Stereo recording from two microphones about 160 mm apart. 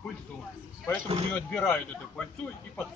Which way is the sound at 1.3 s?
10° left (ahead or behind).